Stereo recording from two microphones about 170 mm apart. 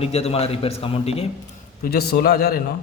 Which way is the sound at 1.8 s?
65° left (ahead or behind).